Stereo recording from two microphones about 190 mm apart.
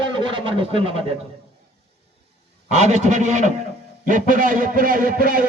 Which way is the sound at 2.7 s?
35° right (ahead or behind).